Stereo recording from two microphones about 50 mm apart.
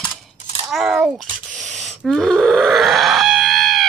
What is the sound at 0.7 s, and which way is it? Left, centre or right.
Speech, centre.